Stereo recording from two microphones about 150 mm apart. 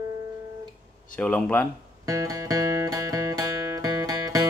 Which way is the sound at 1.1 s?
10° left (ahead or behind).